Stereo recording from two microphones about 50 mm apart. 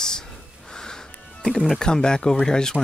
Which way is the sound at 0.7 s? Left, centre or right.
Centre.